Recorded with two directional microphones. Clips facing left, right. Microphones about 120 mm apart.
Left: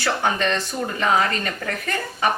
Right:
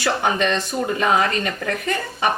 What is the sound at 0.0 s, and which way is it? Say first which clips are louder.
Speech: right 2 dB; 20° right (ahead or behind).